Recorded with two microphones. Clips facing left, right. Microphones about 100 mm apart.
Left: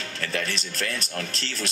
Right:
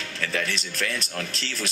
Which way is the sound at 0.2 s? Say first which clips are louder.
Right 1 dB; 35° left (ahead or behind).